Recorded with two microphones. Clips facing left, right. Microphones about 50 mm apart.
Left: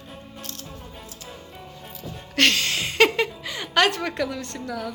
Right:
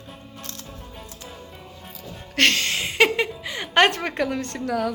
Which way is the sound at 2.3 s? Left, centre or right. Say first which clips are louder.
Even; right.